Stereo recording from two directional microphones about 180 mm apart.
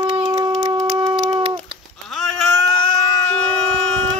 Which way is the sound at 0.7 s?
20° right (ahead or behind).